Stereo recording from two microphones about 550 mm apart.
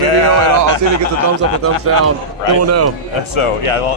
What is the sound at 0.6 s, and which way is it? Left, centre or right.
Speech, left.